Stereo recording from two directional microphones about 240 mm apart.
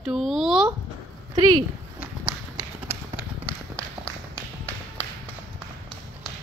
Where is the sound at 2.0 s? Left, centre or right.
Centre.